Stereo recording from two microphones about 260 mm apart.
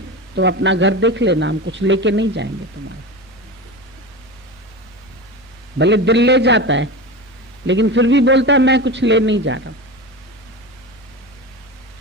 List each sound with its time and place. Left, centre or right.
0.3 s a man's voice: right
5.8 s a man's voice: right